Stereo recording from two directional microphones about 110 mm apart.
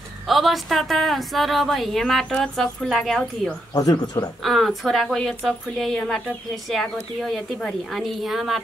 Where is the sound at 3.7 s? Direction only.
35° left (ahead or behind).